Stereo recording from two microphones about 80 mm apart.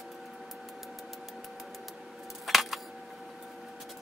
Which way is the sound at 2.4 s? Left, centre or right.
Centre.